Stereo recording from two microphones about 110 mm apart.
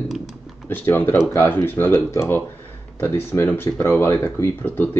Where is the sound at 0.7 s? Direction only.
15° left (ahead or behind).